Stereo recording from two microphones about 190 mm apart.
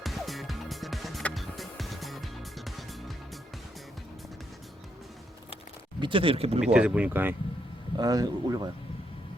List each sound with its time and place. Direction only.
0.0 s music: centre (ahead or behind)
6.0 s speech: 25° right (ahead or behind)
6.6 s speech: 5° right (ahead or behind)